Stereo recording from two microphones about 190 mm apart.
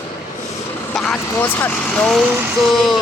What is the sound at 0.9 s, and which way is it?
Speech, 5° left (ahead or behind).